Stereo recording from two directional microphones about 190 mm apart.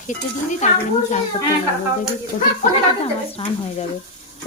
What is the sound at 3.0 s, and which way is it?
Speech, 30° left (ahead or behind).